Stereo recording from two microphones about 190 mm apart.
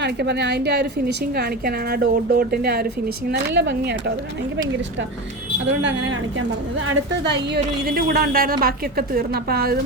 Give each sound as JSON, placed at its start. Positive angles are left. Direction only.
{"t": 0.0, "sound": "a woman's voice", "side_deg": -60}
{"t": 5.6, "sound": "speech", "side_deg": -80}
{"t": 7.1, "sound": "a woman's voice", "side_deg": -65}